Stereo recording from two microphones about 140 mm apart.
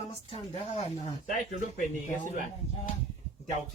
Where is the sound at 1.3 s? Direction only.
70° left (ahead or behind).